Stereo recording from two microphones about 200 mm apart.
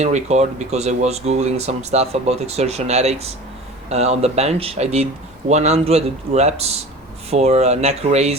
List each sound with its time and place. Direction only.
0.0 s speech: 35° right (ahead or behind)